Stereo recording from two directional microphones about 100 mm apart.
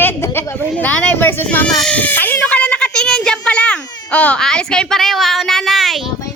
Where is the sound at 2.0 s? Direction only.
15° left (ahead or behind); by 6.0 s centre (ahead or behind).